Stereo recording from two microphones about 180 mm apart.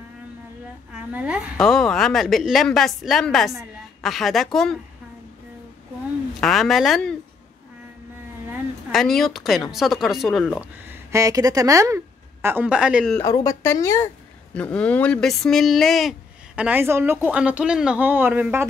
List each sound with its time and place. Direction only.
0.9 s speech: 5° right (ahead or behind)
6.4 s speech: centre (ahead or behind)
8.9 s speech: centre (ahead or behind)
13.2 s speech: 15° left (ahead or behind); by 18.7 s 10° right (ahead or behind)